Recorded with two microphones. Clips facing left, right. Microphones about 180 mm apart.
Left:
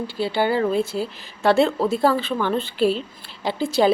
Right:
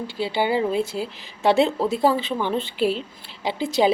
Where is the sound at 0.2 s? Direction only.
15° right (ahead or behind).